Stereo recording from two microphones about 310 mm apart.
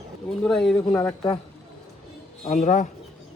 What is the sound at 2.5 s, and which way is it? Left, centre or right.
Speech, left.